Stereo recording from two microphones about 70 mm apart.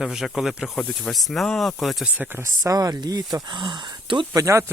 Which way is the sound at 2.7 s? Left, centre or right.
Right.